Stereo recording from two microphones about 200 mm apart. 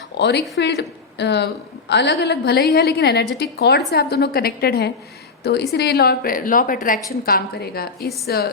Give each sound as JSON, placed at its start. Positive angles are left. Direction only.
{"t": 0.2, "sound": "a woman's voice", "side_deg": 60}